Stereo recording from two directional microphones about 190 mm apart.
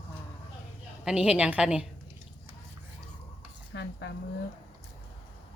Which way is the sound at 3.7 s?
65° left (ahead or behind).